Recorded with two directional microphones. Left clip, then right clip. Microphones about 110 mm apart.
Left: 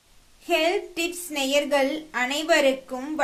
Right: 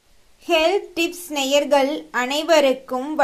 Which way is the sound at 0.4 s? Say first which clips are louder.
Right 5 dB; 30° right (ahead or behind).